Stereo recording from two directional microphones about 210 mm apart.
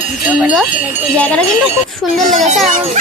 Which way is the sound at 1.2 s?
5° left (ahead or behind).